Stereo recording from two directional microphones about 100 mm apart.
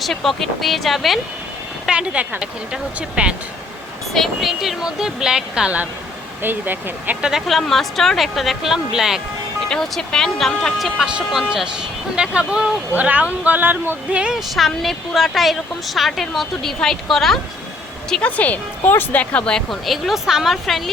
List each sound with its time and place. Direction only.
0.0 s speech: centre (ahead or behind); by 7.2 s 20° right (ahead or behind)
7.2 s speech: 5° right (ahead or behind)
18.1 s speech: 15° left (ahead or behind)